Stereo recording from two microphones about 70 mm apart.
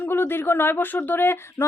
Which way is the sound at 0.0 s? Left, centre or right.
Left.